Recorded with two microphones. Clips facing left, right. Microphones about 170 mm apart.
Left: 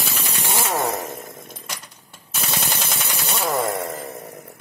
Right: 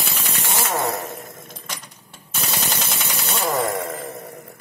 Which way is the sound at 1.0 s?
Centre (ahead or behind).